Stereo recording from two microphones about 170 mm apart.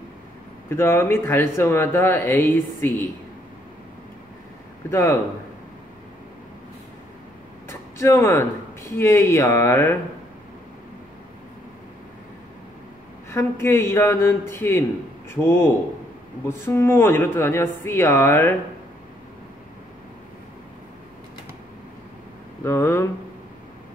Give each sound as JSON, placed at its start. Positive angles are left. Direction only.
{"t": 0.7, "sound": "speech", "side_deg": 15}
{"t": 4.9, "sound": "speech", "side_deg": 15}
{"t": 7.6, "sound": "speech", "side_deg": 15}
{"t": 13.3, "sound": "speech", "side_deg": 15}
{"t": 22.6, "sound": "speech", "side_deg": 15}